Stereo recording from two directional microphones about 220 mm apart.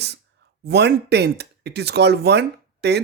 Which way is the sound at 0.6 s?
50° right (ahead or behind).